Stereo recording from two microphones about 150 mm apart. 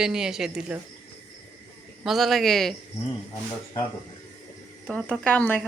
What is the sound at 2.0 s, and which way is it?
Speech, centre (ahead or behind).